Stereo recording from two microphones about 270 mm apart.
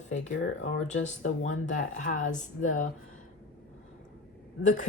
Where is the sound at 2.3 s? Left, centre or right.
Left.